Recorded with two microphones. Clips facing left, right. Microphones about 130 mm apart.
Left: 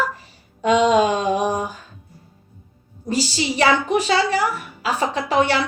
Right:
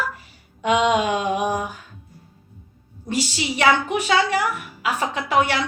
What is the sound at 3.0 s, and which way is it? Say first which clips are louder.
A woman's voice: left 3 dB; 35° left (ahead or behind).